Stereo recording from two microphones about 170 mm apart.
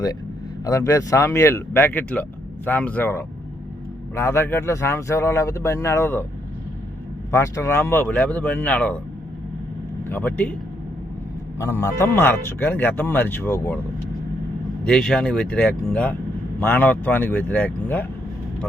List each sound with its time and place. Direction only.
0.6 s speech: 20° left (ahead or behind)
7.3 s speech: 15° left (ahead or behind)
10.0 s speech: 10° left (ahead or behind)
11.6 s speech: 15° left (ahead or behind)
14.8 s speech: 5° left (ahead or behind)